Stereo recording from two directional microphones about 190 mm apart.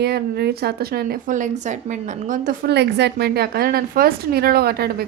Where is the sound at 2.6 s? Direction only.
60° right (ahead or behind).